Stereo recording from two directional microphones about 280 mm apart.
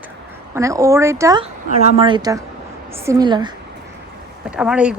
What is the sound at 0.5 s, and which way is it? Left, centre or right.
A woman's voice, centre.